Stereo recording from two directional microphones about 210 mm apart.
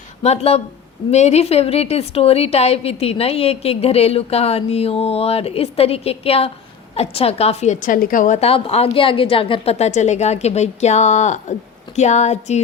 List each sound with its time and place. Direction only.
0.2 s a woman's voice: 30° left (ahead or behind)